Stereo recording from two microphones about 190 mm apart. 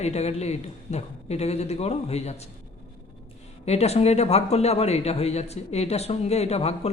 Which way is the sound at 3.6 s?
35° left (ahead or behind).